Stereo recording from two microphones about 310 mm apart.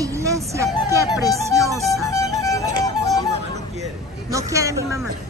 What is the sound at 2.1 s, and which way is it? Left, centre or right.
Music, centre.